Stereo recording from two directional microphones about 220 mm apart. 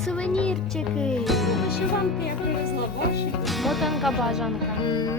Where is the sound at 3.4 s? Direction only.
Centre (ahead or behind).